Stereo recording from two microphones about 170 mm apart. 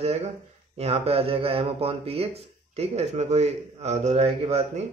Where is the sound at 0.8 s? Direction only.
35° right (ahead or behind).